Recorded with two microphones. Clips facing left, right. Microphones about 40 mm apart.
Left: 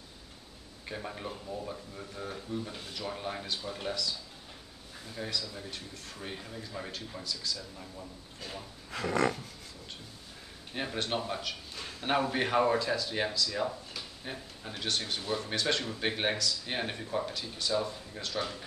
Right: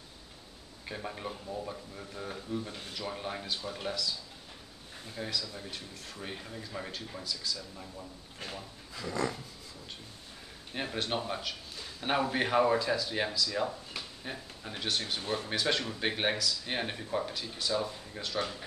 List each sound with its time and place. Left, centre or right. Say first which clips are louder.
0.8 s speech: even; centre
5.1 s speech: even; centre
8.9 s a sound: left 5 dB; left
10.7 s speech: even; centre